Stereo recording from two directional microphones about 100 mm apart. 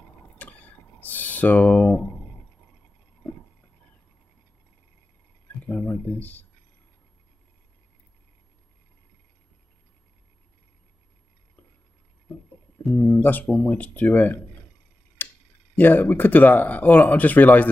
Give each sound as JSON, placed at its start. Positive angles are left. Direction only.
{"t": 0.3, "sound": "drip", "side_deg": 15}
{"t": 5.6, "sound": "a sound", "side_deg": 20}
{"t": 13.0, "sound": "speech", "side_deg": 20}
{"t": 15.2, "sound": "tick-tock", "side_deg": 20}
{"t": 15.7, "sound": "speech", "side_deg": 15}